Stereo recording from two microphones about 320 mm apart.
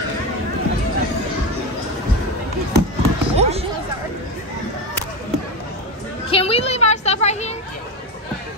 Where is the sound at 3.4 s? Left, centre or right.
Centre.